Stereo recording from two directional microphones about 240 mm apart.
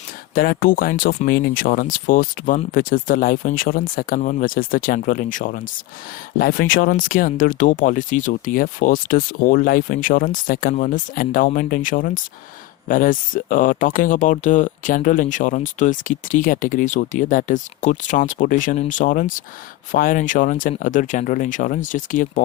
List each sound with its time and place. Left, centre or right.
0.3 s speech: left